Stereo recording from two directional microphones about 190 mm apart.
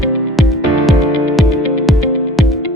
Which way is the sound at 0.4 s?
Centre (ahead or behind).